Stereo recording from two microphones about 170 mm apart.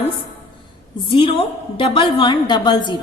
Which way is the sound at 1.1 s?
30° left (ahead or behind).